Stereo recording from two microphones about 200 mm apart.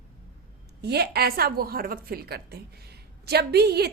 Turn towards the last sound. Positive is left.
turn(degrees=-55)  # may be behind; listen again after turning